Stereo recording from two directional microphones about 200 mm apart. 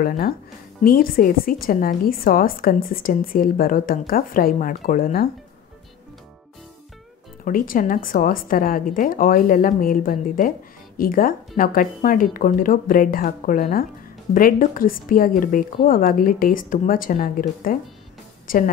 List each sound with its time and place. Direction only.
0.8 s a woman's voice: 45° left (ahead or behind)
7.4 s a woman's voice: 45° left (ahead or behind)